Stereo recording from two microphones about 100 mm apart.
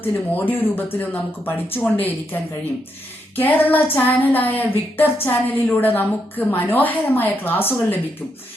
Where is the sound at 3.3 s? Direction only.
20° left (ahead or behind).